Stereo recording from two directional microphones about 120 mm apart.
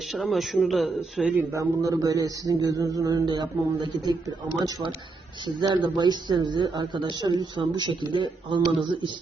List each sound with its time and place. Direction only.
0.1 s speech: centre (ahead or behind)
1.4 s speech: 25° right (ahead or behind)
5.5 s speech: 40° right (ahead or behind)